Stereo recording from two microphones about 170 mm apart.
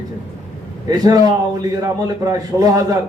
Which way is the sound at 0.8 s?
20° right (ahead or behind).